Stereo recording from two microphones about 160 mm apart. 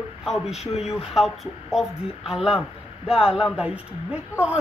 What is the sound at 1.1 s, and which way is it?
Speech, centre (ahead or behind).